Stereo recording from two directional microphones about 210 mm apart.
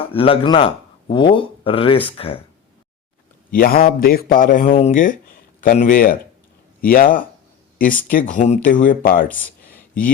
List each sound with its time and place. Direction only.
0.0 s speech: 25° left (ahead or behind)
3.5 s speech: 45° left (ahead or behind)
9.3 s a sound: 10° left (ahead or behind)